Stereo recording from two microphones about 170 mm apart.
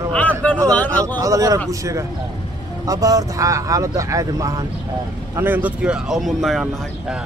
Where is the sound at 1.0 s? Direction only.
20° right (ahead or behind).